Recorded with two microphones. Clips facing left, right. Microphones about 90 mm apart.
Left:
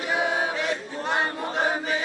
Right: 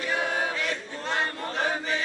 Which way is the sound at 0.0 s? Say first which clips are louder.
Left 3 dB; 15° left (ahead or behind).